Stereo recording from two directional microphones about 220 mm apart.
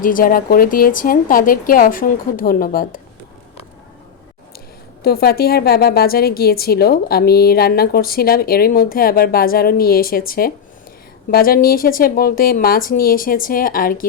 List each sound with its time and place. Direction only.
0.0 s speech: 40° left (ahead or behind)
5.0 s a woman's voice: 45° left (ahead or behind)